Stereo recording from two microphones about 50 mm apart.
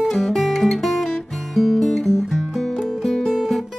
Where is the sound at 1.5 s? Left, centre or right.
Centre.